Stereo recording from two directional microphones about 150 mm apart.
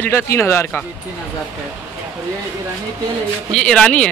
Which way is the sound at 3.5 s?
5° left (ahead or behind).